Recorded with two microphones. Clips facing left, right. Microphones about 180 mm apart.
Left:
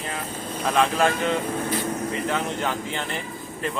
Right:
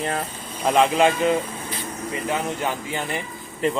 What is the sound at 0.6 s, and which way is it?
Speech, 25° right (ahead or behind).